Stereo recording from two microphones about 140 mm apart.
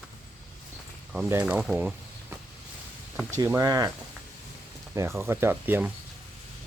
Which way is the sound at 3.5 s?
20° right (ahead or behind).